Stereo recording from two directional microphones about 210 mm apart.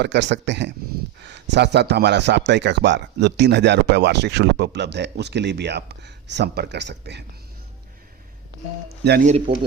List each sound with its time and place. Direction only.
0.0 s speech: 55° right (ahead or behind)
8.9 s speech: 50° right (ahead or behind)